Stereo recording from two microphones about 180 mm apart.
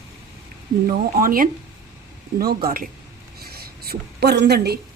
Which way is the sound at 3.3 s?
60° right (ahead or behind).